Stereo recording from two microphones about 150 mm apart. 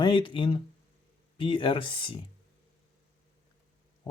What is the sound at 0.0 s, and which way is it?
Speech, 35° left (ahead or behind).